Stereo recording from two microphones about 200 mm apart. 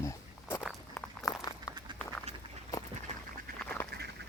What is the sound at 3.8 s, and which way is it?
Duck, 10° left (ahead or behind).